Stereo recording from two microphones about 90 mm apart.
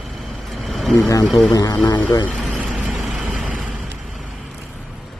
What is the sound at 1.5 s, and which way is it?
Speech, 40° left (ahead or behind).